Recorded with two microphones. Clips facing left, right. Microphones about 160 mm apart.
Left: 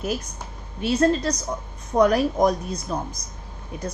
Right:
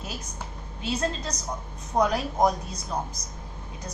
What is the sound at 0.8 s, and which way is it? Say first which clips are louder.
A woman's voice: left 9 dB; 60° left (ahead or behind).